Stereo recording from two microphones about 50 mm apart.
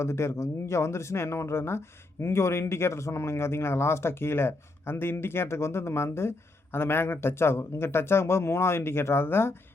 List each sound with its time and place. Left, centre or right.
0.0 s speech: left